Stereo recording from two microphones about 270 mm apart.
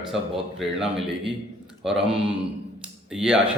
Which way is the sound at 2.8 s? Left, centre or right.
Centre.